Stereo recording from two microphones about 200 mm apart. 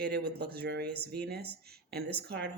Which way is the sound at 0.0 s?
50° right (ahead or behind).